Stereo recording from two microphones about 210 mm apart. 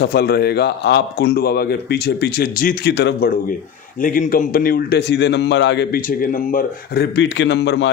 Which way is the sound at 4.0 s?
40° left (ahead or behind).